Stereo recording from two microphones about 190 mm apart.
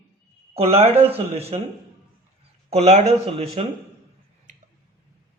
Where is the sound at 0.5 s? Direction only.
30° right (ahead or behind).